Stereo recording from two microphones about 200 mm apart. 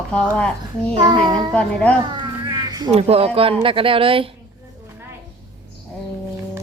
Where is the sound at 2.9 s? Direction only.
30° right (ahead or behind).